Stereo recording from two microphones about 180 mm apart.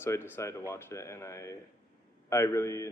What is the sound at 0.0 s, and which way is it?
A man's voice, 15° left (ahead or behind).